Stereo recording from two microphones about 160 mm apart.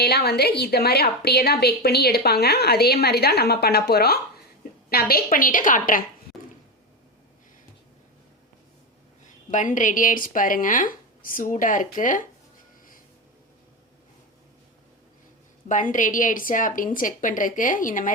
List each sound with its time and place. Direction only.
0.0 s a woman's voice: 90° left; by 6.1 s 60° left (ahead or behind)
9.5 s speech: 50° left (ahead or behind)
15.7 s speech: 55° left (ahead or behind)